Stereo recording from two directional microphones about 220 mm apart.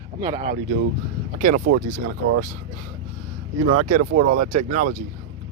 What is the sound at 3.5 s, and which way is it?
Speech, 90° right.